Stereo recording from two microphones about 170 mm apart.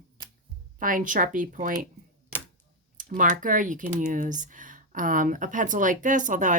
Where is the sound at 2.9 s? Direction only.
50° right (ahead or behind).